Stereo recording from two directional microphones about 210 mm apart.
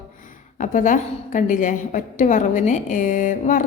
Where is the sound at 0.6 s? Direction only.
40° left (ahead or behind).